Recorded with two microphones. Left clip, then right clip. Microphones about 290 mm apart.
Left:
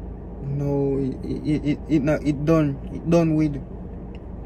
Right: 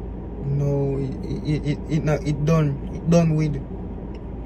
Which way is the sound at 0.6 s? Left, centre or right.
Centre.